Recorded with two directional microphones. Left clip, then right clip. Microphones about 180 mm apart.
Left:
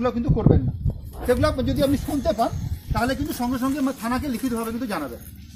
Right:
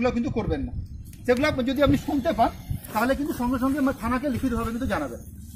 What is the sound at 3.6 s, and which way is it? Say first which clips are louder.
Speech: even; 45° left (ahead or behind).